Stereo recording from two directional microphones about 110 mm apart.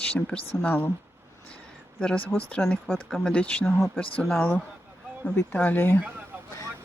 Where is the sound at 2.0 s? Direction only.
10° left (ahead or behind).